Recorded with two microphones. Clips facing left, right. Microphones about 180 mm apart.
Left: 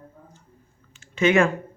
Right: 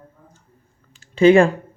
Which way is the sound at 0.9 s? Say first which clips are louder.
Right 8 dB; 35° right (ahead or behind).